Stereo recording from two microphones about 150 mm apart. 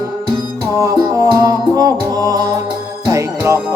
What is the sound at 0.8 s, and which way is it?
Music, 20° right (ahead or behind).